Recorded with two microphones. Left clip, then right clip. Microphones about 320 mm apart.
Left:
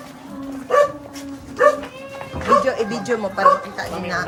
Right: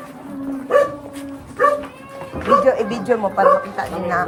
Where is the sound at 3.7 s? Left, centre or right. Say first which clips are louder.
Right 4 dB; centre.